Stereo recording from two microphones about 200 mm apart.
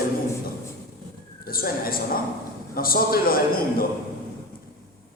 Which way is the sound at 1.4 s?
45° left (ahead or behind).